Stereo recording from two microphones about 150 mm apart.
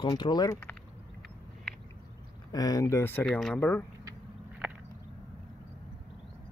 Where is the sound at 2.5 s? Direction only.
25° left (ahead or behind).